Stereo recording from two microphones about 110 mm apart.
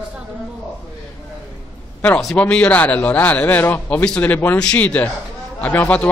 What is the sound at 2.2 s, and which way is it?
A man's voice, 10° left (ahead or behind).